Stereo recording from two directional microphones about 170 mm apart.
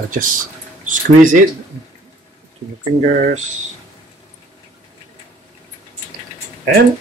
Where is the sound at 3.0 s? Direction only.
45° right (ahead or behind).